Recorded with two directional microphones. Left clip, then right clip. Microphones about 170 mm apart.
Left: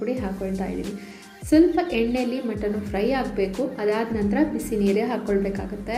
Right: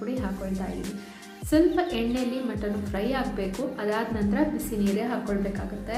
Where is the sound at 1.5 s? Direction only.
10° left (ahead or behind).